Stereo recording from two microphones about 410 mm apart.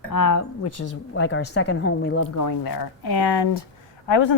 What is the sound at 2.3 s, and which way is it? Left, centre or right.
Speech, left.